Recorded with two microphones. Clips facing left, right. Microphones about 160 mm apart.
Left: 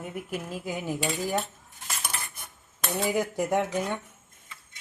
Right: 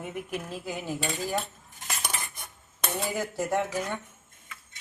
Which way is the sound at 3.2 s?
15° left (ahead or behind).